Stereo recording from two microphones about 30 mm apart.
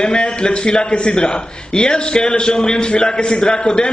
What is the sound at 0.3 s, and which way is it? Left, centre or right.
A man's voice, left.